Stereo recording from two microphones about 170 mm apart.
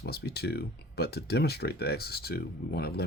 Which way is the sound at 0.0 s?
75° left (ahead or behind).